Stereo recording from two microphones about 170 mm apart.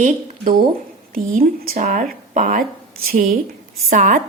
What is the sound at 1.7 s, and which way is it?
Speech, 45° right (ahead or behind).